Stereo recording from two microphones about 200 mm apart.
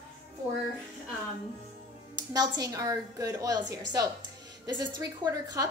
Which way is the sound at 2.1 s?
20° right (ahead or behind).